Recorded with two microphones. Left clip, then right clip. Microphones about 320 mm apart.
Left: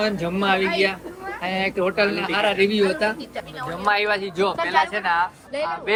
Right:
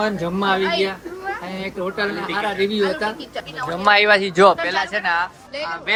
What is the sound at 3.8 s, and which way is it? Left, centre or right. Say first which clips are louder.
Speech: right 7 dB; right.